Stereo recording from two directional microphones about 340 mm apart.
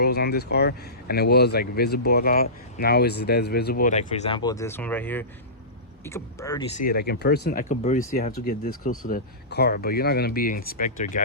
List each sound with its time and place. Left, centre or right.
0.0 s speech: left; by 6.7 s centre
6.7 s speech: left